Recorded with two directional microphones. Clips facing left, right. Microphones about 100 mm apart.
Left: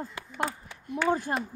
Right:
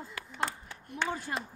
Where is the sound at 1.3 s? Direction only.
35° left (ahead or behind).